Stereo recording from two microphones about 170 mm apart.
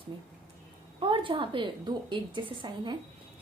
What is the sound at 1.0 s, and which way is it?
A woman's voice, 30° right (ahead or behind).